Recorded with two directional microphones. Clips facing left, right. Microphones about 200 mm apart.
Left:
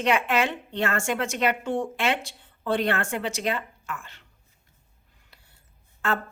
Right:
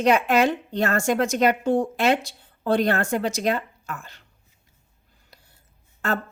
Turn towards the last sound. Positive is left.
turn(degrees=-40)  # may be behind; listen again after turning